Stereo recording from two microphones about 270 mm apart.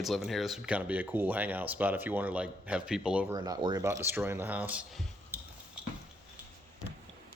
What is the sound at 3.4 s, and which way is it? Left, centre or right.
Speech, centre.